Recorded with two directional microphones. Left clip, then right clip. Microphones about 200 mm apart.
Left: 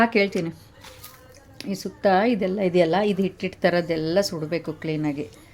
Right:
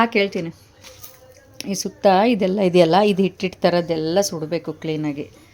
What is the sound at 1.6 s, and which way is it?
A woman's voice, 20° right (ahead or behind).